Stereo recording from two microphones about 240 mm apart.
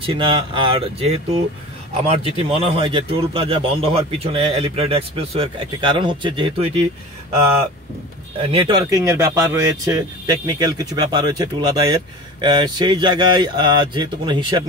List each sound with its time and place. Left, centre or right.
0.0 s a man's voice: right
8.4 s speech: right